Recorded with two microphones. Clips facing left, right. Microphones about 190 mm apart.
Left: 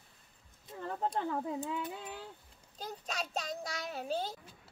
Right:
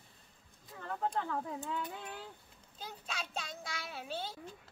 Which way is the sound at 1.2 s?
20° left (ahead or behind).